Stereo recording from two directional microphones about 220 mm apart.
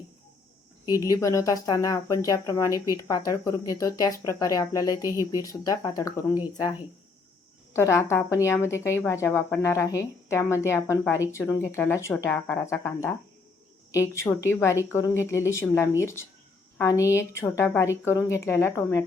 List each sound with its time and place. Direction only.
1.0 s a woman's voice: 15° left (ahead or behind)
7.7 s a woman's voice: 10° left (ahead or behind)